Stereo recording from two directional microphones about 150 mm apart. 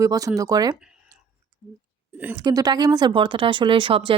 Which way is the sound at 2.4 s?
25° right (ahead or behind).